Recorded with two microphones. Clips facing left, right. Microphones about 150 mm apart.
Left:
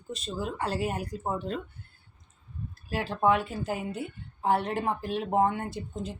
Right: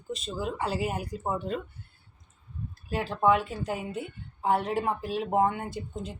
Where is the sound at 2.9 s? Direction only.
Centre (ahead or behind).